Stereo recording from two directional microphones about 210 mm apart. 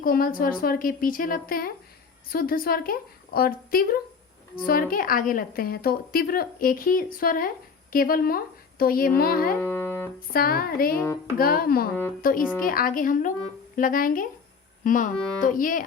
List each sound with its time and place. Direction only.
0.0 s a woman's voice: 45° left (ahead or behind)
9.6 s speech: 10° left (ahead or behind)
10.3 s a woman's voice: 45° left (ahead or behind)
10.9 s speech: 10° left (ahead or behind)
11.3 s a woman's voice: 45° left (ahead or behind)